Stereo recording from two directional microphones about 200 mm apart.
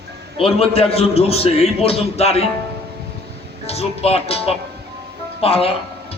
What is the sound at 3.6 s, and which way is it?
A man's voice, 30° left (ahead or behind).